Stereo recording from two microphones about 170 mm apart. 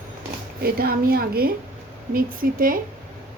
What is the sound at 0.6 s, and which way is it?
A woman's voice, 60° right (ahead or behind).